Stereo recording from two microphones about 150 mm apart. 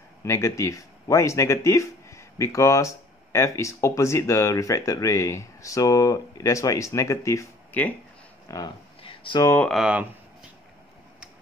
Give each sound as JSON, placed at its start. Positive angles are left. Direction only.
{"t": 0.2, "sound": "speech", "side_deg": 20}
{"t": 9.0, "sound": "a sound", "side_deg": 35}
{"t": 9.4, "sound": "speech", "side_deg": 20}
{"t": 9.7, "sound": "speech", "side_deg": -5}